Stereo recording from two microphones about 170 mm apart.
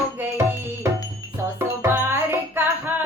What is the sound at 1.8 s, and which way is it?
Music, 15° right (ahead or behind).